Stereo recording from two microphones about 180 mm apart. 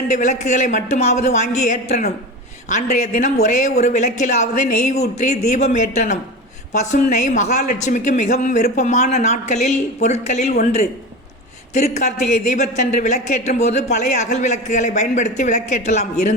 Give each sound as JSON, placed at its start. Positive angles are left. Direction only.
{"t": 0.1, "sound": "speech", "side_deg": 40}